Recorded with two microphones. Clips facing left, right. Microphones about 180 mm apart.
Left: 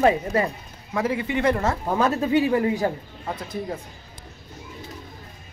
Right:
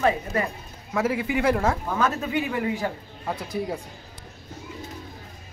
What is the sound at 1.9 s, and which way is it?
A man's voice, 30° left (ahead or behind).